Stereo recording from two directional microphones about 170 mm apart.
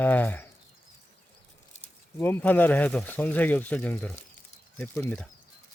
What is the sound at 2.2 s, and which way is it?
Speech, 15° left (ahead or behind).